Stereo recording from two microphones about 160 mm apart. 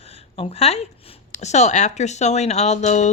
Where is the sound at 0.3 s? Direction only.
40° left (ahead or behind).